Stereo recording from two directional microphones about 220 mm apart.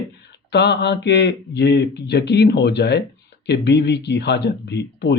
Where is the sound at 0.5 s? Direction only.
50° left (ahead or behind).